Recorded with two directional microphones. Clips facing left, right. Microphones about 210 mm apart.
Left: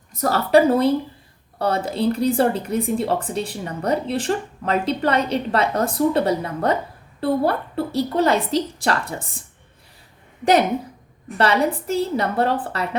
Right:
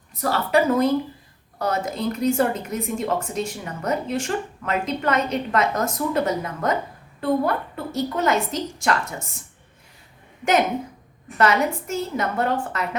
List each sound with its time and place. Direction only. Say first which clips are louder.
0.1 s speech: left 5 dB; 40° left (ahead or behind)
11.3 s speech: left 1 dB; 35° left (ahead or behind)